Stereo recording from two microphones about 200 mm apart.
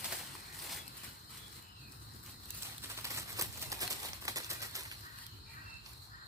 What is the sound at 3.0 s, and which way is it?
Typewriter, 15° right (ahead or behind).